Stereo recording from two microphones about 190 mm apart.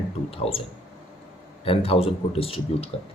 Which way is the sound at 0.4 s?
30° left (ahead or behind).